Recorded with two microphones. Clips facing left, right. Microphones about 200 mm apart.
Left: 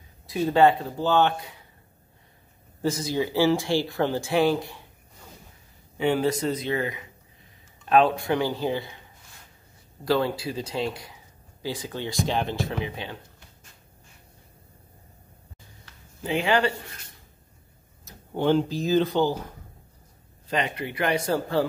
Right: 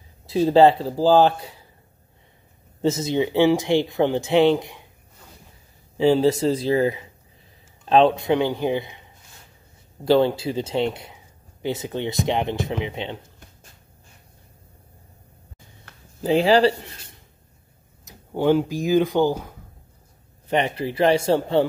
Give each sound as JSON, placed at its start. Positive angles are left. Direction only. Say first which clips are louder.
{"t": 0.3, "sound": "speech", "louder": "right 5 dB", "side_deg": -30}
{"t": 2.8, "sound": "speech", "louder": "right 5 dB", "side_deg": -25}
{"t": 5.9, "sound": "speech", "louder": "right 6 dB", "side_deg": -25}
{"t": 10.0, "sound": "speech", "louder": "right 6 dB", "side_deg": -25}
{"t": 16.2, "sound": "speech", "louder": "right 7 dB", "side_deg": -35}
{"t": 18.0, "sound": "speech", "louder": "right 4 dB", "side_deg": -10}
{"t": 20.4, "sound": "speech", "louder": "right 5 dB", "side_deg": -30}